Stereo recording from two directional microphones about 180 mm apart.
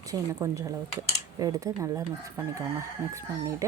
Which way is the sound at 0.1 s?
15° right (ahead or behind).